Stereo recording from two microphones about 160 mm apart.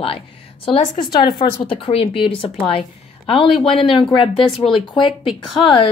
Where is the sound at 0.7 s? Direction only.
30° left (ahead or behind).